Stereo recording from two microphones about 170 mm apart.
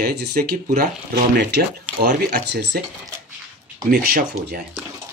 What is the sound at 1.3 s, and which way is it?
Speech, 85° right.